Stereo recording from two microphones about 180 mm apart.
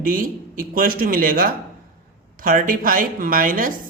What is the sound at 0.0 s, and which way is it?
Speech, 50° right (ahead or behind).